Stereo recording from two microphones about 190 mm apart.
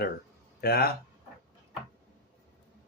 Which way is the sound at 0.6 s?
55° left (ahead or behind).